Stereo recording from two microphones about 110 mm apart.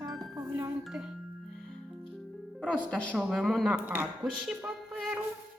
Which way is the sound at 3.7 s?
15° right (ahead or behind).